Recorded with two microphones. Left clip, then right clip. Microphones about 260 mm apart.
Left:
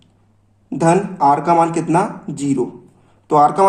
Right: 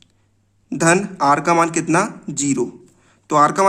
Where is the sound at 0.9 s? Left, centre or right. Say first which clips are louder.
Left 2 dB; right.